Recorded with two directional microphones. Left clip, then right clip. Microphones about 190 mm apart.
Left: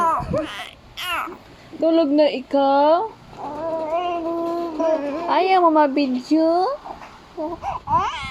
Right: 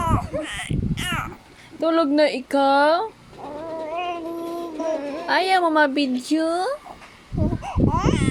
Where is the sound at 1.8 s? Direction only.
50° right (ahead or behind).